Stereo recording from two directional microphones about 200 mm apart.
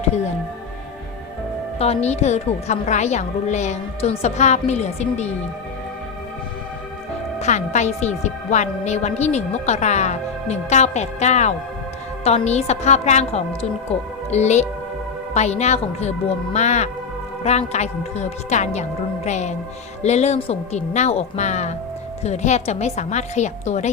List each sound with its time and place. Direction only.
1.8 s a woman's voice: 30° left (ahead or behind)
7.3 s a woman's voice: 35° left (ahead or behind)